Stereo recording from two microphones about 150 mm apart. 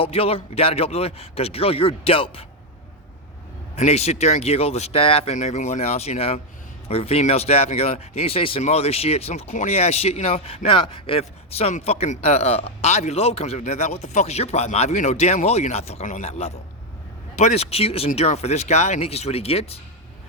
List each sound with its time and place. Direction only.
0.0 s speech: 40° left (ahead or behind)
3.8 s speech: 45° left (ahead or behind)